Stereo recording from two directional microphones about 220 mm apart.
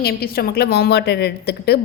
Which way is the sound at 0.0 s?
45° left (ahead or behind).